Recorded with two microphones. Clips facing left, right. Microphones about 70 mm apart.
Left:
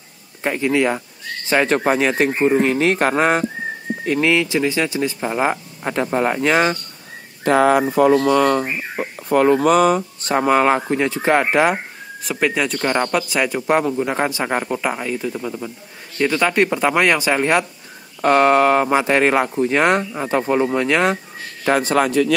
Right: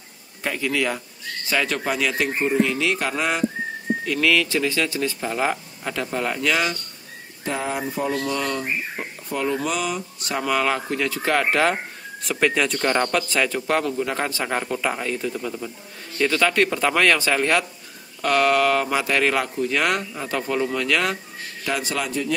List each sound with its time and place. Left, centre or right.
0.4 s speech: left
4.0 s speech: left
7.4 s speech: left; by 11.8 s centre
12.2 s speech: centre; by 21.2 s left
21.6 s a man's voice: left